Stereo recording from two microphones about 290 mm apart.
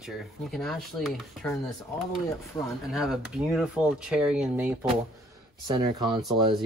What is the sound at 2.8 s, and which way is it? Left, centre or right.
Speech, centre.